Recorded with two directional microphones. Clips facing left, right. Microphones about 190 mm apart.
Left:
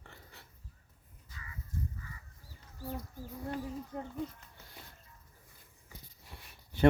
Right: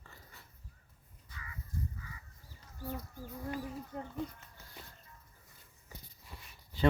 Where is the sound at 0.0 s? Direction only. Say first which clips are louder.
Left 2 dB; 70° left (ahead or behind).